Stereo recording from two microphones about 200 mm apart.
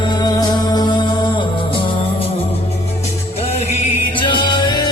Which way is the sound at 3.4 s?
30° left (ahead or behind).